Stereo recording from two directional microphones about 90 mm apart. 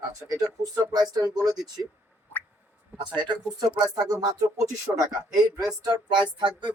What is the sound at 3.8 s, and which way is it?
Speech, 45° right (ahead or behind).